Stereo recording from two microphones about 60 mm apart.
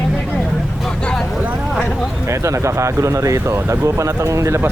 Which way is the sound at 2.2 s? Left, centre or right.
Right.